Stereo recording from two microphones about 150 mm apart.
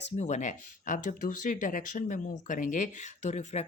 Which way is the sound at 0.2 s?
50° left (ahead or behind).